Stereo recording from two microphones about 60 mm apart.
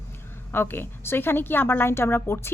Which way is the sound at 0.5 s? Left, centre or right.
Left.